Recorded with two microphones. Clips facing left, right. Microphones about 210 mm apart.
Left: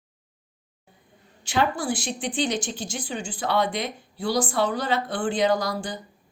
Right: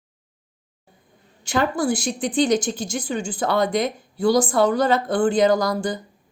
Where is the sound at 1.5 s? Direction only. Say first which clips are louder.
Right 4 dB; 40° right (ahead or behind).